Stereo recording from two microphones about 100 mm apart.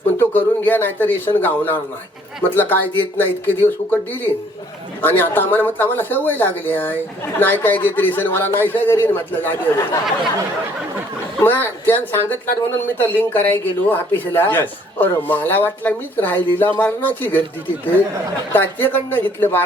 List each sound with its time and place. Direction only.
0.2 s speech: 20° left (ahead or behind)
11.3 s speech: 20° left (ahead or behind)
18.5 s speech: 20° left (ahead or behind)